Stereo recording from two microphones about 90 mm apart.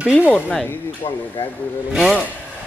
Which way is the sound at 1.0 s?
90° left.